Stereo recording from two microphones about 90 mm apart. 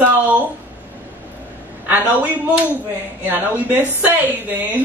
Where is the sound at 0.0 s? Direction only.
20° right (ahead or behind).